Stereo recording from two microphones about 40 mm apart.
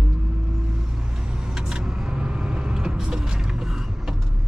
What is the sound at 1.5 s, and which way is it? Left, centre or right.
Vehicle, centre.